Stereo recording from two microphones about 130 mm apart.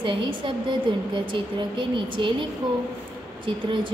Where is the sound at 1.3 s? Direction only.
40° right (ahead or behind).